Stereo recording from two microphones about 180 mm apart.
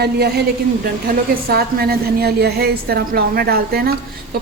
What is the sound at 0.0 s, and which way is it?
A woman's voice, 60° right (ahead or behind).